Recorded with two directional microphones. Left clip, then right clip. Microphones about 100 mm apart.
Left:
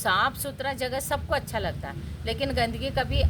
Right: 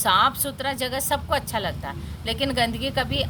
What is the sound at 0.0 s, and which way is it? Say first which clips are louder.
A woman's voice: right 5 dB; 35° left (ahead or behind).